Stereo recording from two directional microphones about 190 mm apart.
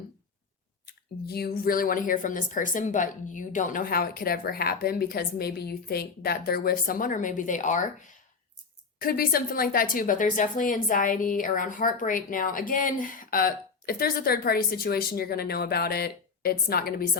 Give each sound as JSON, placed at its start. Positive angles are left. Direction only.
{"t": 1.3, "sound": "a woman's voice", "side_deg": 55}